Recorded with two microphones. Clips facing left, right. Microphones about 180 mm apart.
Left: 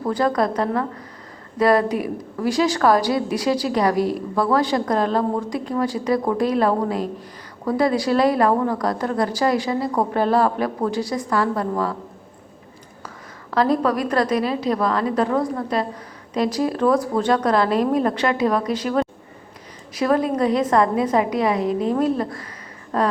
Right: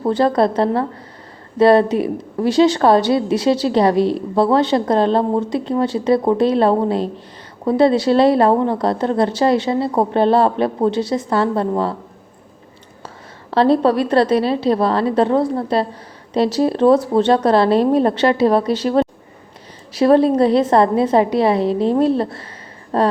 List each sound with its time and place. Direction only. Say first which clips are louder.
0.0 s a woman's voice: right 5 dB; 30° right (ahead or behind)
13.5 s a woman's voice: right 5 dB; 30° right (ahead or behind)